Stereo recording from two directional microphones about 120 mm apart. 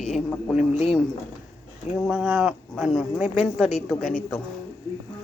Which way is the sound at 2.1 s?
5° right (ahead or behind).